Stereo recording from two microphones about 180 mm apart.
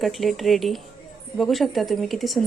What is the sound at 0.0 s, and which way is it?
A woman's voice, centre (ahead or behind).